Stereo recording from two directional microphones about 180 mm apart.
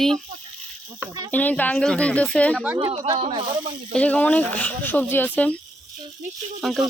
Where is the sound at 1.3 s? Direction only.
10° left (ahead or behind).